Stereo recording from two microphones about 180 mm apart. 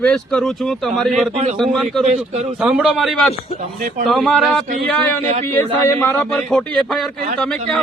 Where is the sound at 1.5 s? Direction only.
Centre (ahead or behind).